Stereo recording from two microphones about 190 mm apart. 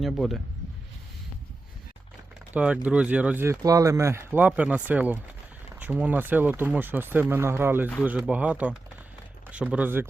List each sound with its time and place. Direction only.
0.0 s speech: centre (ahead or behind)
2.8 s speech: 5° right (ahead or behind)